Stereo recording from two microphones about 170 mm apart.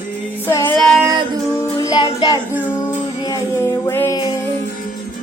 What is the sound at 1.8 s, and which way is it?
Music, 25° left (ahead or behind).